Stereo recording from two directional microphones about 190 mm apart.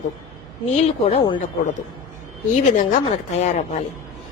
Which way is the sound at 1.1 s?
30° left (ahead or behind).